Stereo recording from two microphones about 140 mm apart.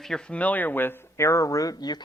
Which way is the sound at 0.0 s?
5° left (ahead or behind).